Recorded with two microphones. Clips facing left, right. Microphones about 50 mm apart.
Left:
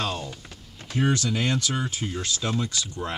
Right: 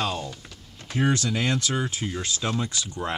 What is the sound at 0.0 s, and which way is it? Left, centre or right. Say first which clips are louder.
Speech: right 1 dB; centre.